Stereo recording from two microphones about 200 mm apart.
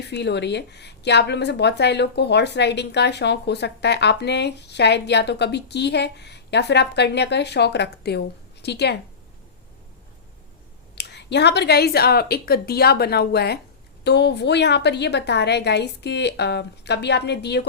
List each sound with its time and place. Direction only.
0.1 s speech: 60° left (ahead or behind)
10.9 s speech: 60° left (ahead or behind)